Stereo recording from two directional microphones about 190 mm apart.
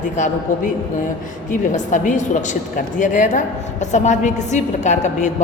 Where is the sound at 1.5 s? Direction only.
40° left (ahead or behind).